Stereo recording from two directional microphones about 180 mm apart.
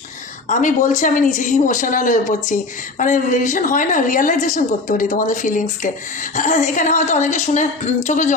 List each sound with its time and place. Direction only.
0.4 s a woman's voice: 45° left (ahead or behind)